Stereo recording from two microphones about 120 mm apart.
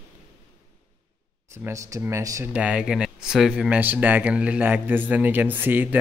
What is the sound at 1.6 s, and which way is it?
Speech, 20° right (ahead or behind).